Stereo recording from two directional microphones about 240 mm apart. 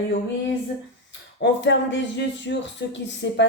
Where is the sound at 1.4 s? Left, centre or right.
Left.